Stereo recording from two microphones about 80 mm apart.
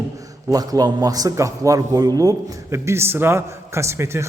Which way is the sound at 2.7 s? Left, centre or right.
Right.